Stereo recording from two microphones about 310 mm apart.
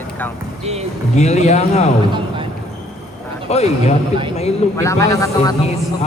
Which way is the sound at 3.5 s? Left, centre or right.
Centre.